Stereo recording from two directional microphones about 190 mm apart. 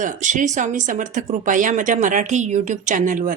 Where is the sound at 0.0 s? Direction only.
40° right (ahead or behind).